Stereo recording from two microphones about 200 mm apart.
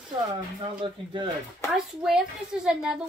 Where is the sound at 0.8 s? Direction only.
25° right (ahead or behind).